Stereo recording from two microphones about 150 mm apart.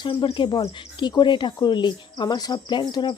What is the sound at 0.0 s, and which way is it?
Speech, 35° left (ahead or behind).